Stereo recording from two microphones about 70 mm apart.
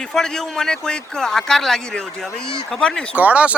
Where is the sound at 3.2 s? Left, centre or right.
Right.